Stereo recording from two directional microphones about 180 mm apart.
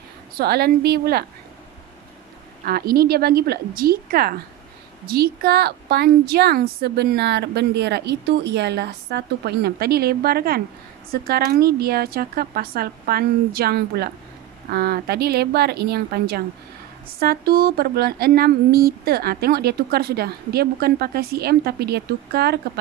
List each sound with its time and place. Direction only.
0.4 s a woman's voice: 60° right (ahead or behind)
2.6 s a woman's voice: 55° right (ahead or behind)